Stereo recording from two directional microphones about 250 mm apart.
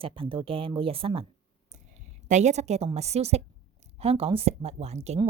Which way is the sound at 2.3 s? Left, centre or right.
Right.